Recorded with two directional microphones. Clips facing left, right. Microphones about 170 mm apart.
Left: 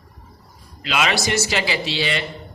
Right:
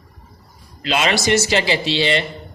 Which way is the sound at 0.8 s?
30° right (ahead or behind).